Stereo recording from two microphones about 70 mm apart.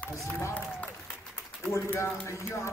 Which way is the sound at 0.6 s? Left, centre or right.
Centre.